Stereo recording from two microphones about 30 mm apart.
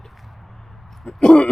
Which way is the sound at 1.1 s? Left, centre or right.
Left.